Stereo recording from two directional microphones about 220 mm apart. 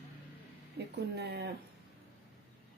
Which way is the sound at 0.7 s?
50° right (ahead or behind).